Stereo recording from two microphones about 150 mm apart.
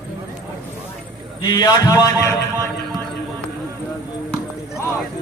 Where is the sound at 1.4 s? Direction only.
30° left (ahead or behind).